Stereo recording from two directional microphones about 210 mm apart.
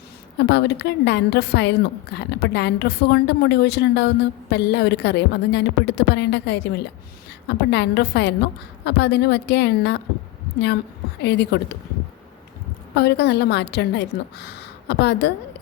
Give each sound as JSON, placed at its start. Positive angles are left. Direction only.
{"t": 0.3, "sound": "a woman's voice", "side_deg": 55}
{"t": 11.2, "sound": "a woman's voice", "side_deg": 55}
{"t": 12.9, "sound": "a woman's voice", "side_deg": 50}